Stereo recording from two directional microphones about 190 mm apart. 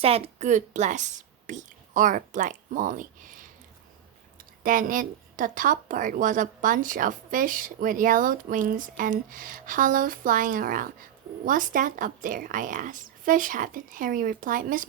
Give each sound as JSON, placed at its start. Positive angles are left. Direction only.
{"t": 0.0, "sound": "a woman's voice", "side_deg": -35}
{"t": 4.6, "sound": "a woman's voice", "side_deg": -45}